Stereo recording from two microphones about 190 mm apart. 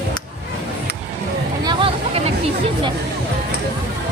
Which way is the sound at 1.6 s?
25° right (ahead or behind).